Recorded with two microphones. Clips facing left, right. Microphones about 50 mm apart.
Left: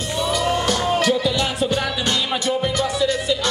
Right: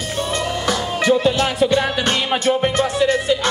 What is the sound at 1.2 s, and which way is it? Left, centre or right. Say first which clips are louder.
Music: right 4 dB; right.